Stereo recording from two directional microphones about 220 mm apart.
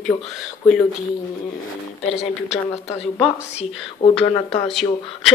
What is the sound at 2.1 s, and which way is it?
A woman's voice, 30° left (ahead or behind).